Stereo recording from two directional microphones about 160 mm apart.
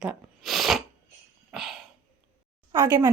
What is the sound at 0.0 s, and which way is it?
Sneeze, centre (ahead or behind).